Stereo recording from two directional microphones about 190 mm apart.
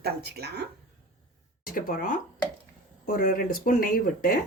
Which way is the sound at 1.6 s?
45° left (ahead or behind).